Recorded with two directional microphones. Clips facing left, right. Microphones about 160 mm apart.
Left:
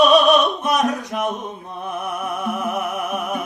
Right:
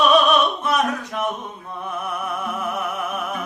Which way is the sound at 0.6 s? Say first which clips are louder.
Left 2 dB; 15° left (ahead or behind).